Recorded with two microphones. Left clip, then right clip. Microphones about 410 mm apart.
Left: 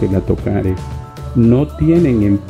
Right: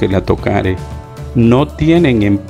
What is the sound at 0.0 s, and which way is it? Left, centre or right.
Speech, right.